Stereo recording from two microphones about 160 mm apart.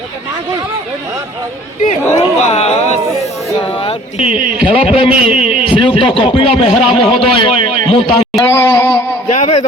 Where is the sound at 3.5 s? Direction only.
35° left (ahead or behind).